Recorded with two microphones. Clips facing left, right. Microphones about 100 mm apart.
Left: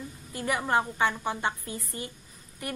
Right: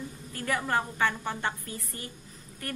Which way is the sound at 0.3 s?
15° left (ahead or behind).